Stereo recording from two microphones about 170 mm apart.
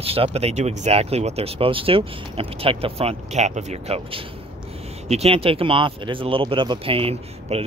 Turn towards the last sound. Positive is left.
turn(degrees=-35)  # may be behind; listen again after turning